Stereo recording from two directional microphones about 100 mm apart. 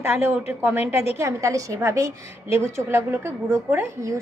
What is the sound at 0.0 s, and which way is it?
A woman's voice, 25° right (ahead or behind).